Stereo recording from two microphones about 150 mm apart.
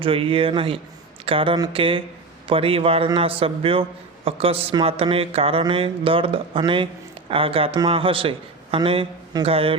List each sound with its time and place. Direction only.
0.0 s speech: 35° right (ahead or behind)